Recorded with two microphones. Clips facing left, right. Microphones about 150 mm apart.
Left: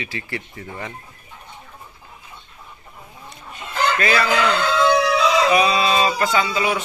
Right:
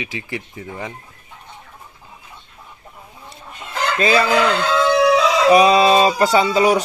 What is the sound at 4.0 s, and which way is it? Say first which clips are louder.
Speech: right 7 dB; 25° right (ahead or behind).